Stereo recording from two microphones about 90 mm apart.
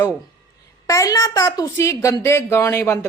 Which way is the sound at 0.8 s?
40° left (ahead or behind).